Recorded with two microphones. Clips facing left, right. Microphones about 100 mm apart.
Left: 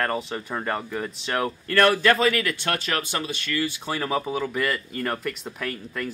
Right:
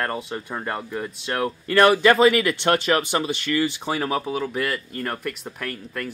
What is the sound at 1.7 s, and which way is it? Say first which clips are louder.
Speech: right 3 dB; 15° right (ahead or behind).